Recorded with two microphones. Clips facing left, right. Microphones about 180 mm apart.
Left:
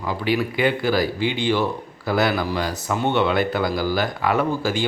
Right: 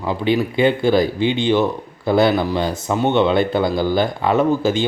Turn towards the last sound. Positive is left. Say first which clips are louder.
# right 5 dB
turn(degrees=-20)  # may be behind; listen again after turning